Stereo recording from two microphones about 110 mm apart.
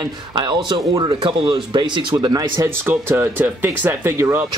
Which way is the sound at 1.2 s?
40° right (ahead or behind).